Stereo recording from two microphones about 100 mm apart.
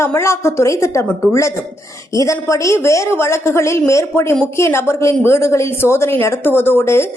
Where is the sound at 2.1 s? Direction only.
35° left (ahead or behind).